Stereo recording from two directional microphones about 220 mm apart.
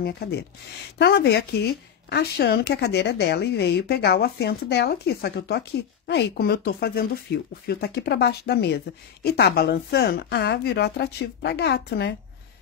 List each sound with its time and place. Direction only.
0.0 s speech: 45° left (ahead or behind)